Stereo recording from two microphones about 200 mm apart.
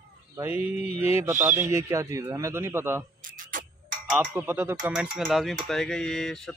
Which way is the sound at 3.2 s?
40° right (ahead or behind).